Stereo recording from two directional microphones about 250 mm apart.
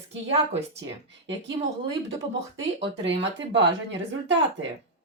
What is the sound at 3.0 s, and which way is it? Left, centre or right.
A woman's voice, right.